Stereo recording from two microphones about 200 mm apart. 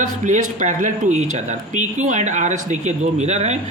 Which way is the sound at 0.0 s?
40° right (ahead or behind).